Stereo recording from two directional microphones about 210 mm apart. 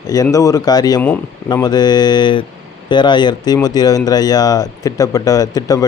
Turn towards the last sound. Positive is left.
turn(degrees=15)  # may be behind; listen again after turning